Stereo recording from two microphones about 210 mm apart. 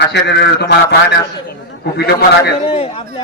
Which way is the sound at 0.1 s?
55° left (ahead or behind).